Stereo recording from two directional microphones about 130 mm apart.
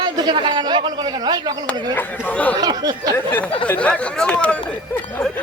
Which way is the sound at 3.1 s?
15° left (ahead or behind).